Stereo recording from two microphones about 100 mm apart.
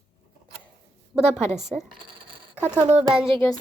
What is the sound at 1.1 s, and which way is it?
Speech, centre (ahead or behind).